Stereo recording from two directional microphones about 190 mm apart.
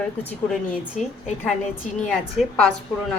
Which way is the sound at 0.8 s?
5° right (ahead or behind).